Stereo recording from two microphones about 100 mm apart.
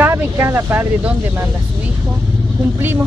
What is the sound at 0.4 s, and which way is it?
Speech, 25° right (ahead or behind).